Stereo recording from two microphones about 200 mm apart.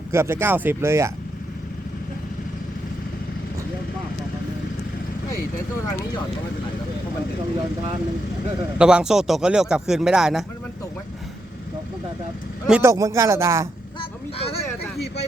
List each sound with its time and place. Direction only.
0.1 s speech: 10° right (ahead or behind)
8.8 s speech: 5° right (ahead or behind)
12.6 s speech: 5° right (ahead or behind)
12.9 s speech: 15° right (ahead or behind)
14.0 s vehicle: 30° left (ahead or behind)